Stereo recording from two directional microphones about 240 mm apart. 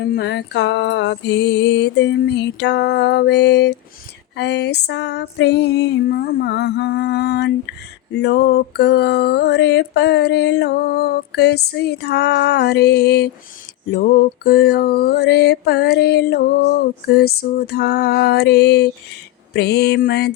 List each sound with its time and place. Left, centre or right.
0.2 s female singing: left
13.9 s mantra: left
19.5 s female singing: left